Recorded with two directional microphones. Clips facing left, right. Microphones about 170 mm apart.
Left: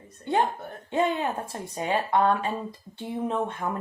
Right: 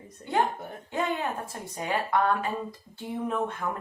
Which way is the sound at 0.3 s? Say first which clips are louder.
Left 2 dB; 25° left (ahead or behind).